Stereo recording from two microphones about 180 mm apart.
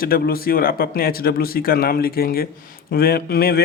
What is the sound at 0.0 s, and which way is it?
Speech, 55° left (ahead or behind).